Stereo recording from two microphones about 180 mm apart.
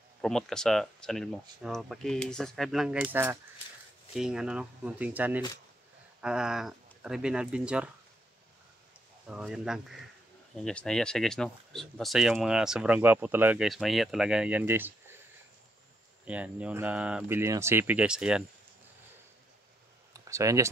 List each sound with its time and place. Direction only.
0.2 s speech: 5° left (ahead or behind)
9.3 s speech: 5° right (ahead or behind)
16.3 s speech: 5° right (ahead or behind)
20.1 s clicking: 15° right (ahead or behind)